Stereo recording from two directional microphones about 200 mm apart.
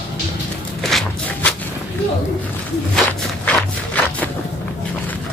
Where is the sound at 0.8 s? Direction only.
5° left (ahead or behind).